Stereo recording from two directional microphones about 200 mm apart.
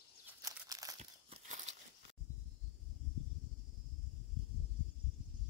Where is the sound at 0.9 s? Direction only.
35° right (ahead or behind).